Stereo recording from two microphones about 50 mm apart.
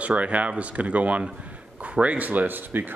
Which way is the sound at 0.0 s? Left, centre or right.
Right.